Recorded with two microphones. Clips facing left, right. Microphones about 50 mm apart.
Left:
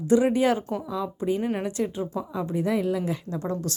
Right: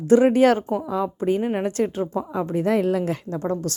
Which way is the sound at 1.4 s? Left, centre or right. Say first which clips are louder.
Right 4 dB; right.